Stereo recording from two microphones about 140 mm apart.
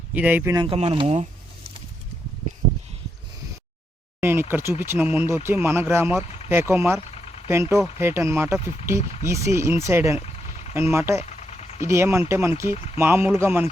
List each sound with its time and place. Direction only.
0.1 s speech: 10° right (ahead or behind)
0.5 s speech: 35° right (ahead or behind)
0.8 s a sound: 45° right (ahead or behind)
4.2 s speech: 15° right (ahead or behind)
7.1 s vehicle: 50° left (ahead or behind)
7.4 s speech: 20° right (ahead or behind)
11.2 s a sound: 55° left (ahead or behind)
11.9 s speech: 20° right (ahead or behind)
12.7 s speech: 50° left (ahead or behind)
13.0 s speech: 15° right (ahead or behind)